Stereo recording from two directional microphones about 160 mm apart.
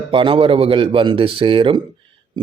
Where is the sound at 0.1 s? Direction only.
30° right (ahead or behind).